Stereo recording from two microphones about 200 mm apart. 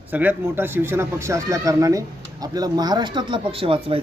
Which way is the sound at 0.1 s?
10° right (ahead or behind).